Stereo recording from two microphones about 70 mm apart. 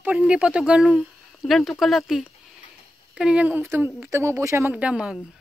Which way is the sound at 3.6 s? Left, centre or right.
Right.